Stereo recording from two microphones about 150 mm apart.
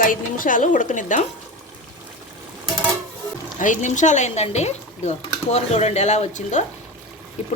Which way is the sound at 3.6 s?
55° left (ahead or behind).